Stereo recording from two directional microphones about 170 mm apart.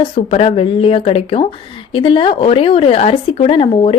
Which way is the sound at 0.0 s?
35° left (ahead or behind).